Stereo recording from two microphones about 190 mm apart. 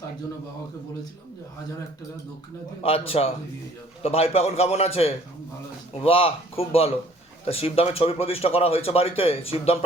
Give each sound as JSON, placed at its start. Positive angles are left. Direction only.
{"t": 2.8, "sound": "speech", "side_deg": 30}